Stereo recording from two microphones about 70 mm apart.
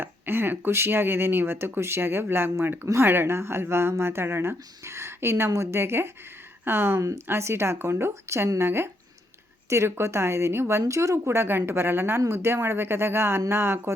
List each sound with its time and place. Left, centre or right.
0.0 s speech: right